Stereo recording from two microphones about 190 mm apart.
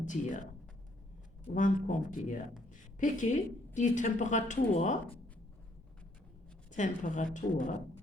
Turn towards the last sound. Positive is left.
turn(degrees=40)  # may be behind; listen again after turning